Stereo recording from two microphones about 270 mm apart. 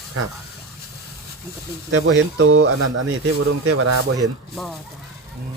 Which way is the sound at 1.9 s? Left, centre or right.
Right.